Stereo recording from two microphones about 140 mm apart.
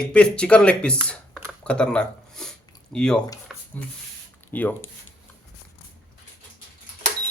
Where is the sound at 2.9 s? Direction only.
5° left (ahead or behind).